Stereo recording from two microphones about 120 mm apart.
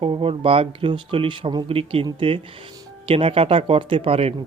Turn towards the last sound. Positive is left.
turn(degrees=-55)  # may be behind; listen again after turning